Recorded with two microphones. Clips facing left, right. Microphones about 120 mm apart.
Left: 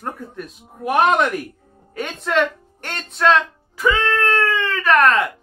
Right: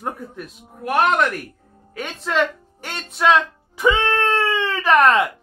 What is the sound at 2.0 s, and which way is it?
Speech, centre (ahead or behind).